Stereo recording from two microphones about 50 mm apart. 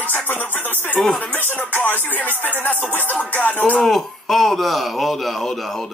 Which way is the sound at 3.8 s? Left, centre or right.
Centre.